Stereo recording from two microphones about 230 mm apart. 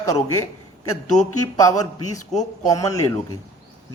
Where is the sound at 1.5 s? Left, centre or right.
Centre.